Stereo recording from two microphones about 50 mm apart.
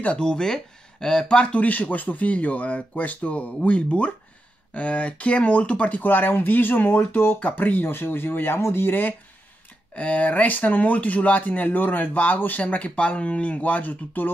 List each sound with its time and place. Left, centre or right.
0.0 s speech: left
6.0 s speech: left
7.8 s speech: left
9.9 s speech: left
12.6 s speech: left